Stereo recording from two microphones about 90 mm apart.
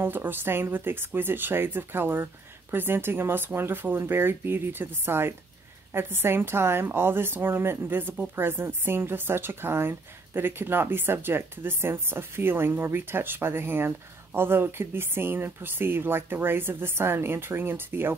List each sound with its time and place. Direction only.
0.0 s a woman's voice: 20° right (ahead or behind)